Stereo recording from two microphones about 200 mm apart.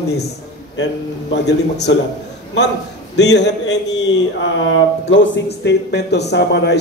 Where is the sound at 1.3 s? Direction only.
60° left (ahead or behind).